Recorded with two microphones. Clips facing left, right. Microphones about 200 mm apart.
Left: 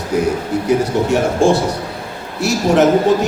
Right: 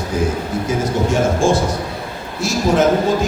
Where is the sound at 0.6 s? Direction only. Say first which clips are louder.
Left 4 dB; 70° left (ahead or behind).